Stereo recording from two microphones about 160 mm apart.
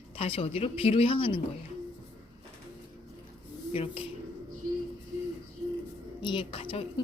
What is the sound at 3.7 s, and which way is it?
Speech, 40° left (ahead or behind).